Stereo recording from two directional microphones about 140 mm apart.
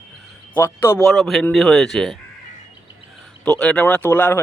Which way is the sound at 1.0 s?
Centre (ahead or behind).